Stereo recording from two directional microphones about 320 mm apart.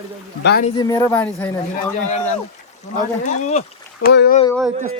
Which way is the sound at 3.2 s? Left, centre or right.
Left.